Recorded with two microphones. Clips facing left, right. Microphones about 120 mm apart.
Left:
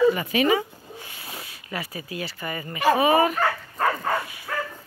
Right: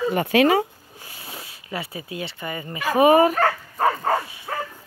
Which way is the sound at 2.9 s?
45° right (ahead or behind).